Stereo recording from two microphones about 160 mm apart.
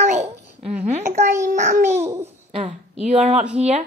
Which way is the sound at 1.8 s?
15° right (ahead or behind).